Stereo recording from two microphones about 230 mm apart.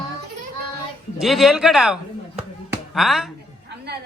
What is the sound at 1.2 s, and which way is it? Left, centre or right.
Chop, centre.